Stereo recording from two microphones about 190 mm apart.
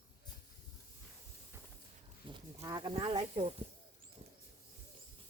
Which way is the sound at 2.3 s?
20° right (ahead or behind).